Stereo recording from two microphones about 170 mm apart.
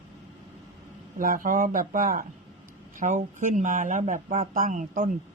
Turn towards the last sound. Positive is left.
turn(degrees=-50)  # may be behind; listen again after turning